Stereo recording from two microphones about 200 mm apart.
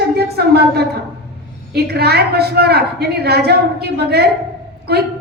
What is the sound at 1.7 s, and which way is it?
A woman's voice, 55° right (ahead or behind).